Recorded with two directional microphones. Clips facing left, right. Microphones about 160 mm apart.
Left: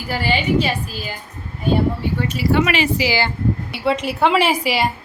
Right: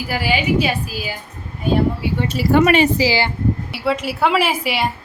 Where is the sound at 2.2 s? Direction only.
45° right (ahead or behind).